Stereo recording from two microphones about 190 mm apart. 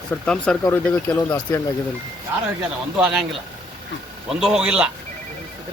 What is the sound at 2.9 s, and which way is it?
Speech, 10° right (ahead or behind).